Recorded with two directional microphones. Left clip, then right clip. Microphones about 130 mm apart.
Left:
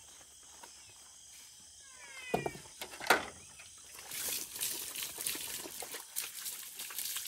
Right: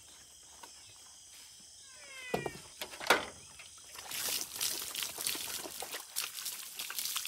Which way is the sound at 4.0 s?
Centre (ahead or behind).